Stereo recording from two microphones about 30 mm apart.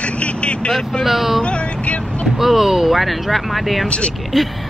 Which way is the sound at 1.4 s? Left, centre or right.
Left.